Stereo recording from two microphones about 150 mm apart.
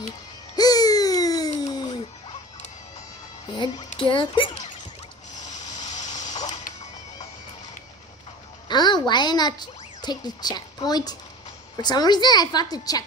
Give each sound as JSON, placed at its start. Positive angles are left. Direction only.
{"t": 0.6, "sound": "a sound", "side_deg": 25}
{"t": 3.5, "sound": "music", "side_deg": 35}
{"t": 5.4, "sound": "vehicle", "side_deg": 50}
{"t": 8.6, "sound": "a woman's voice", "side_deg": 30}